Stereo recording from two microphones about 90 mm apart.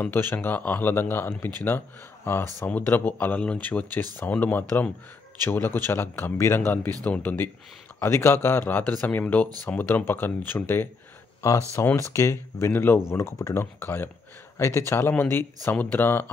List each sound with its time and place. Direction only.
0.0 s speech: 25° left (ahead or behind)
12.0 s speech: 30° left (ahead or behind)